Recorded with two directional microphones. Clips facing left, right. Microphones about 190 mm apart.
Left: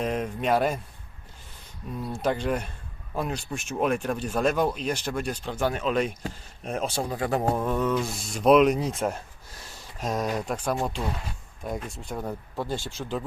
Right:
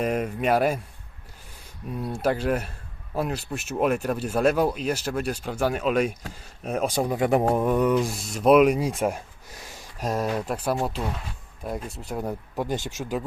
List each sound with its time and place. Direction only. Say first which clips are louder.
0.0 s speech: right 3 dB; 10° right (ahead or behind)
2.0 s speech: right 2 dB; 10° right (ahead or behind)